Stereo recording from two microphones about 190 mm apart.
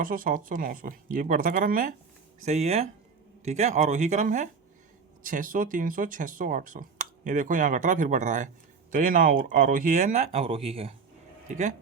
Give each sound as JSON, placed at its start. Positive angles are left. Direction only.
{"t": 0.0, "sound": "speech", "side_deg": -45}
{"t": 2.4, "sound": "speech", "side_deg": -35}